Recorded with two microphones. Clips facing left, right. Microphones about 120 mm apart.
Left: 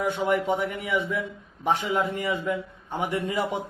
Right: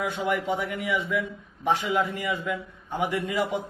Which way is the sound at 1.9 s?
30° left (ahead or behind).